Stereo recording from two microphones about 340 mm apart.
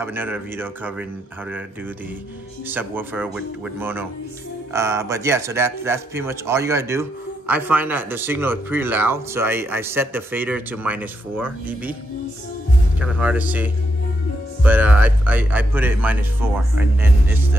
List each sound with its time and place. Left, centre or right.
0.0 s speech: centre
2.7 s speech: centre
13.0 s speech: centre